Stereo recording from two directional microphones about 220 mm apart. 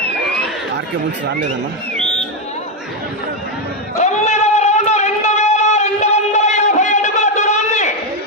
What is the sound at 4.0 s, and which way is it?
Music, 30° left (ahead or behind).